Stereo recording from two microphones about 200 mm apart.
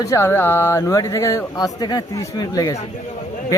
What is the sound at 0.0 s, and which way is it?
A man's voice, 15° left (ahead or behind).